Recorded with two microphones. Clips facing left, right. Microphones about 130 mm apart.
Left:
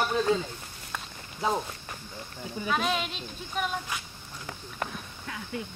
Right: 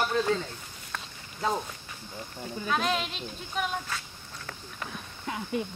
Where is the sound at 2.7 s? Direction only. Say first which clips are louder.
Even; centre (ahead or behind).